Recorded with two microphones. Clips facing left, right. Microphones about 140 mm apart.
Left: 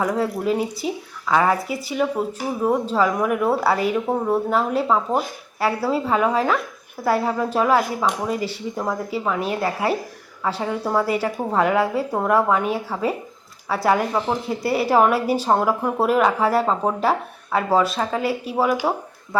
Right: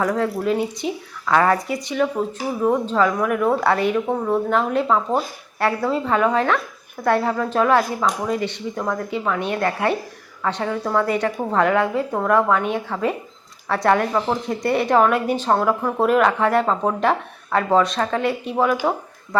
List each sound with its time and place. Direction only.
0.0 s speech: 10° left (ahead or behind)